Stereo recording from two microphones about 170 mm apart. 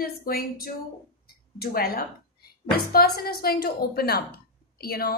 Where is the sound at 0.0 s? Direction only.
60° left (ahead or behind).